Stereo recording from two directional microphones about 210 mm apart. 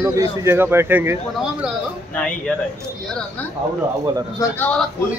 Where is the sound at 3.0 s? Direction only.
5° left (ahead or behind).